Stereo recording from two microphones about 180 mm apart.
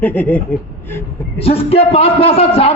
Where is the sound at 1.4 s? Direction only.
35° left (ahead or behind).